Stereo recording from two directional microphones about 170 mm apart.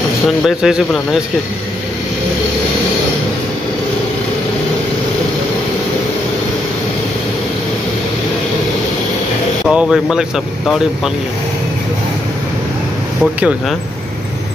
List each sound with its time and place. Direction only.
0.5 s speech: 5° right (ahead or behind)
9.7 s speech: 5° right (ahead or behind)
13.2 s speech: 5° right (ahead or behind)